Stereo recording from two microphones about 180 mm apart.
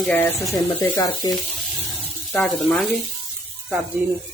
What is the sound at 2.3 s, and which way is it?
Speech, 5° left (ahead or behind).